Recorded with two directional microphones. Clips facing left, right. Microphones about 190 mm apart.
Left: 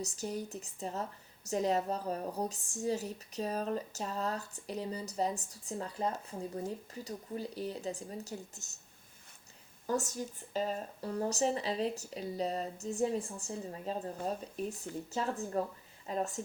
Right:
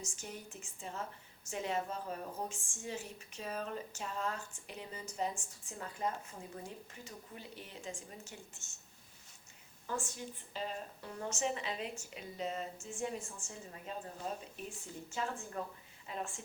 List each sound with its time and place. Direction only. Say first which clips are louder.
0.0 s speech: left 9 dB; 35° left (ahead or behind)
9.8 s speech: left 7 dB; 40° left (ahead or behind)